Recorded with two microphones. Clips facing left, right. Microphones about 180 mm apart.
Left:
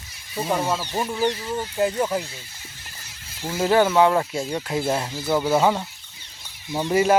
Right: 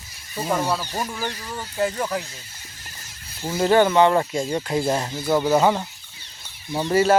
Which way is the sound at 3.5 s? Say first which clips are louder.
Right 1 dB; 5° left (ahead or behind).